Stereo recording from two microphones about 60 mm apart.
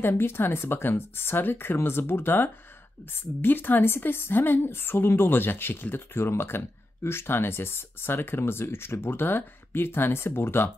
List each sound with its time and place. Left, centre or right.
0.0 s speech: left